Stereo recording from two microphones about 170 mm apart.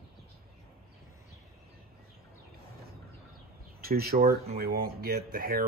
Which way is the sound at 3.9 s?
65° right (ahead or behind).